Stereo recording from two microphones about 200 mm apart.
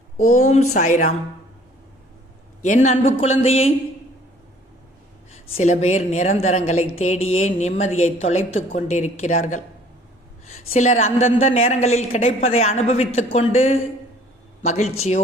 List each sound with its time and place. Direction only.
0.3 s a woman's voice: 35° left (ahead or behind)
2.6 s a woman's voice: 35° left (ahead or behind)
5.5 s a woman's voice: 30° left (ahead or behind)